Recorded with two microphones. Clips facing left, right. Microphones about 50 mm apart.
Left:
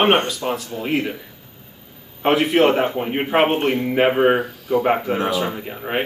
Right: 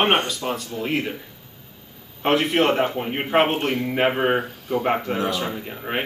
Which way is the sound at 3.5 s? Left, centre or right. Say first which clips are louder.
Left 4 dB; centre.